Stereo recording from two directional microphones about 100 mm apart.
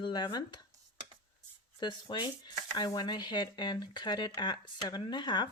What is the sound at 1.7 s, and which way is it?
Speech, 50° left (ahead or behind).